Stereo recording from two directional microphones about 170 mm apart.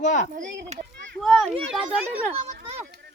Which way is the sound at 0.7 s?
40° right (ahead or behind).